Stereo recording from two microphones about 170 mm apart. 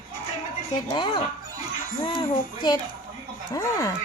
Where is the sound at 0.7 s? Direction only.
30° left (ahead or behind).